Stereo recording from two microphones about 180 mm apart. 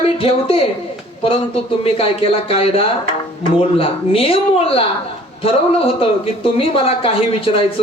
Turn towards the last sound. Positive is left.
turn(degrees=30)  # may be behind; listen again after turning